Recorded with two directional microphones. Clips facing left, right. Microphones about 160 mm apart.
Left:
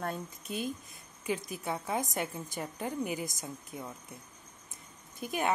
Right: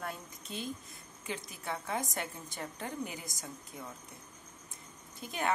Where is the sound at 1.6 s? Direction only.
20° left (ahead or behind).